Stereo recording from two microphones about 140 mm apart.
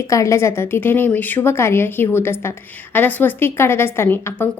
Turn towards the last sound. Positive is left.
turn(degrees=15)  # may be behind; listen again after turning